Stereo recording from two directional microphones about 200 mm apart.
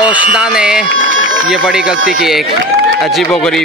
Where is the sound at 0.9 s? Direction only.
75° right (ahead or behind).